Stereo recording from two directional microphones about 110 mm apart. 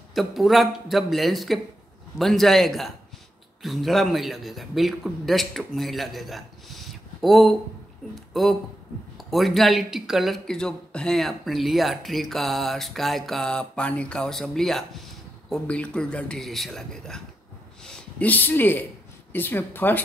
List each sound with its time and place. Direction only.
0.1 s a man's voice: centre (ahead or behind); by 20.0 s 20° left (ahead or behind)